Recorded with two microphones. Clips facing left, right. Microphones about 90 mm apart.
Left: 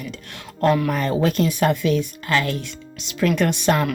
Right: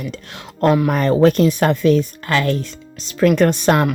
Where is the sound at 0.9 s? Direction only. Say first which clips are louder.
Right 7 dB; 50° right (ahead or behind).